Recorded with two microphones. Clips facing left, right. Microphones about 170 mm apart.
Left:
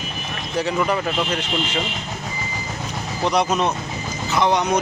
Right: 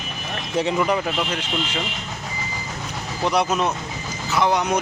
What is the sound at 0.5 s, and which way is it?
Speech, 25° right (ahead or behind).